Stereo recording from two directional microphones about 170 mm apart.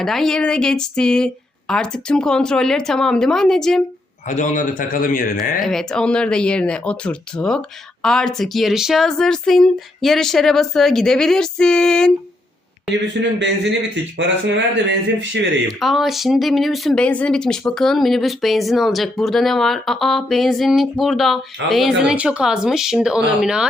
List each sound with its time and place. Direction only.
0.0 s speech: centre (ahead or behind)
4.3 s a man's voice: 45° left (ahead or behind)
5.6 s speech: centre (ahead or behind)
13.4 s speech: 90° right
15.6 s speech: centre (ahead or behind)